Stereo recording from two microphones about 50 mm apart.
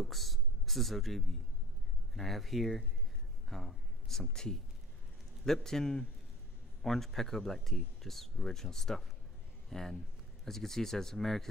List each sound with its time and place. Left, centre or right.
0.0 s speech: centre
3.4 s a sound: centre
4.3 s speech: centre